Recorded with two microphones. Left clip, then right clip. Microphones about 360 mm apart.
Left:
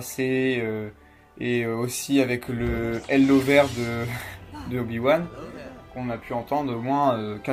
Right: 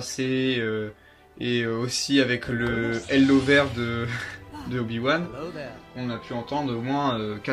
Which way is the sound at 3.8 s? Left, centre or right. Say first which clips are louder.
Even; left.